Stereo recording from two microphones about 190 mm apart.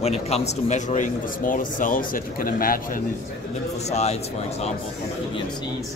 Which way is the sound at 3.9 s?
35° left (ahead or behind).